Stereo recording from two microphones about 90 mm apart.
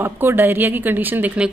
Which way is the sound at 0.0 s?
25° right (ahead or behind).